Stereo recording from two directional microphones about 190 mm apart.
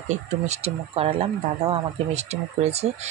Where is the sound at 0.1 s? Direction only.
35° right (ahead or behind).